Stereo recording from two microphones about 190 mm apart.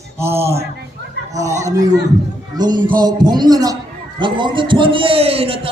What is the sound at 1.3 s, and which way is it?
Speech, 15° right (ahead or behind).